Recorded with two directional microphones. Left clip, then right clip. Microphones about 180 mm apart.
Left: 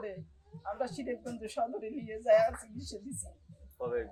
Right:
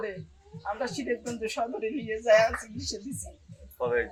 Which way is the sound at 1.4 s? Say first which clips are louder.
Right 2 dB; 25° left (ahead or behind).